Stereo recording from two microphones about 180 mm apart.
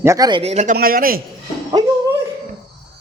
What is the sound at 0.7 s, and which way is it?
Speech, 55° right (ahead or behind).